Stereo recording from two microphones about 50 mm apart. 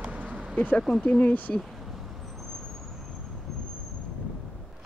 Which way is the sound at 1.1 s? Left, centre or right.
Left.